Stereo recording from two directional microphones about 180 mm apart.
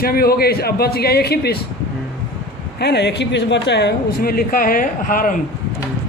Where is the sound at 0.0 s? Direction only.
55° left (ahead or behind).